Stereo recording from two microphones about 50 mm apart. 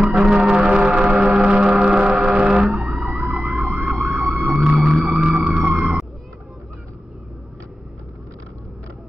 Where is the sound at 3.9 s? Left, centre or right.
Right.